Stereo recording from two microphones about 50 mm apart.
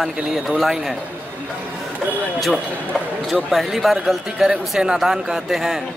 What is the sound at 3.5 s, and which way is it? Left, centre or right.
Speech, centre.